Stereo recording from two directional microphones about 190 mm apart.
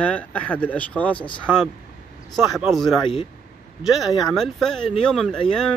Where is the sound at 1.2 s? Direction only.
25° left (ahead or behind).